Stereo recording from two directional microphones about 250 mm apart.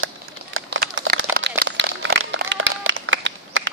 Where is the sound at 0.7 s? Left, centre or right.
Right.